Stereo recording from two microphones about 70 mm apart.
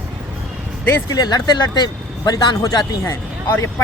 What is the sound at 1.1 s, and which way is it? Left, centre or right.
Speech, left.